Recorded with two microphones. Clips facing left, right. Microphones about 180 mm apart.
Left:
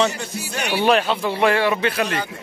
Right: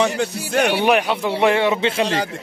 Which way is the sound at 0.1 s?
55° right (ahead or behind).